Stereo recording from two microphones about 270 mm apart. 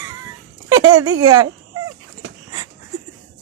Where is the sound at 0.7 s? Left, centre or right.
Centre.